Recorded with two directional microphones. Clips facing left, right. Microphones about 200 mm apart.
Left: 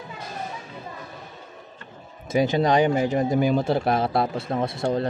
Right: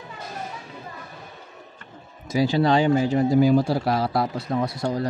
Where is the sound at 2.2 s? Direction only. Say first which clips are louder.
Even; 20° left (ahead or behind).